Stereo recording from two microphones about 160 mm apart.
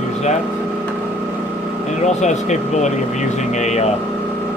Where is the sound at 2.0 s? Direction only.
45° left (ahead or behind).